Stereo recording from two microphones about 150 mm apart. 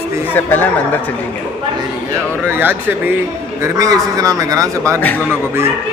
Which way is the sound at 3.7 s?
25° right (ahead or behind).